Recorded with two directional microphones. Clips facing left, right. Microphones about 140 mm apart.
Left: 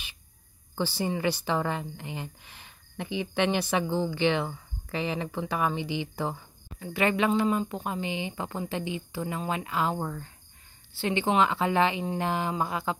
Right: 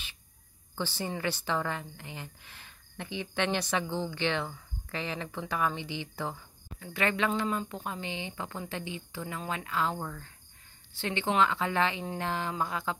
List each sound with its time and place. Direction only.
0.7 s speech: 15° left (ahead or behind)
11.0 s speech: 15° left (ahead or behind)